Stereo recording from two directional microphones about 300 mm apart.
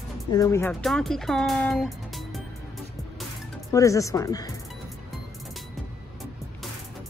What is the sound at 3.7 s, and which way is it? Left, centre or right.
Speech, centre.